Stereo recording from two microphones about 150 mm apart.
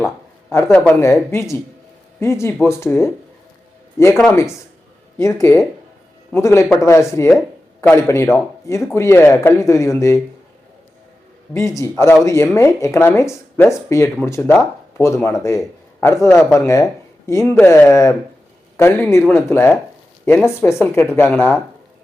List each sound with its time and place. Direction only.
0.5 s speech: 10° left (ahead or behind)
4.3 s speech: 20° left (ahead or behind)
11.5 s speech: 20° left (ahead or behind)